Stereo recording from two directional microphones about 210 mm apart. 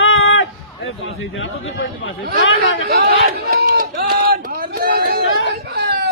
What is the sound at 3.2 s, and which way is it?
Run, 45° right (ahead or behind).